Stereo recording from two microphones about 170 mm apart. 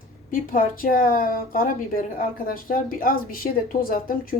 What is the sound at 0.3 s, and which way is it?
A woman's voice, 55° left (ahead or behind).